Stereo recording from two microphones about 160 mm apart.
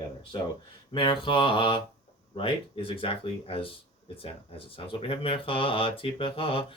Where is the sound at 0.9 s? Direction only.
30° left (ahead or behind).